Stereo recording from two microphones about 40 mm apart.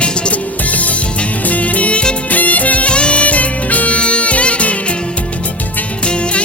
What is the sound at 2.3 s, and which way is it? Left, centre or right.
Music, left.